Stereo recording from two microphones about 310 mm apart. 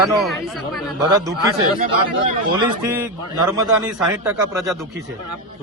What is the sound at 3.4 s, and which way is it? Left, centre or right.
A man's voice, centre.